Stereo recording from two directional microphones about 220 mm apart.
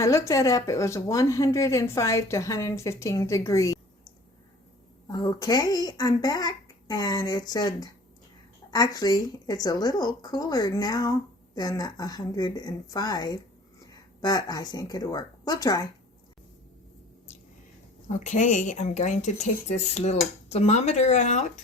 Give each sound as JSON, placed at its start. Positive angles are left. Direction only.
{"t": 0.0, "sound": "a woman's voice", "side_deg": 15}
{"t": 5.1, "sound": "a woman's voice", "side_deg": 20}
{"t": 18.2, "sound": "speech", "side_deg": 35}